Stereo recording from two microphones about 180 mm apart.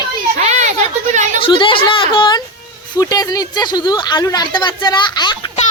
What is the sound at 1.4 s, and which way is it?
A woman's voice, 30° left (ahead or behind).